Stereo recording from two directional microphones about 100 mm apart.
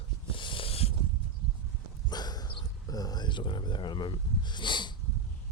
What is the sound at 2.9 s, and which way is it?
Speech, 40° left (ahead or behind).